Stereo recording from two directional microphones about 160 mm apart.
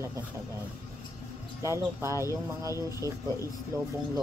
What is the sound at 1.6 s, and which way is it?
Speech, 20° right (ahead or behind).